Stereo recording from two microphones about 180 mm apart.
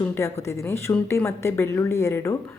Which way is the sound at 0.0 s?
15° left (ahead or behind).